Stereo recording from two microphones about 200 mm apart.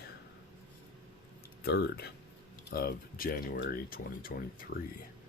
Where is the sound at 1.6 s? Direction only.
55° left (ahead or behind).